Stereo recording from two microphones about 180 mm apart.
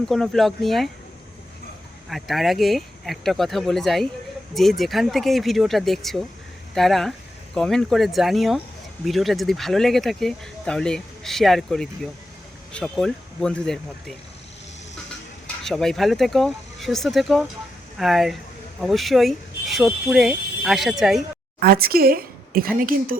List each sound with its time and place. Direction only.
0.1 s speech: centre (ahead or behind)
2.0 s speech: centre (ahead or behind)
15.6 s speech: centre (ahead or behind)
21.6 s speech: 55° right (ahead or behind)